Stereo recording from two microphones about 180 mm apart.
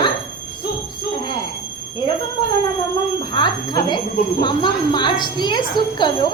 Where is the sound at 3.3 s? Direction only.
25° left (ahead or behind).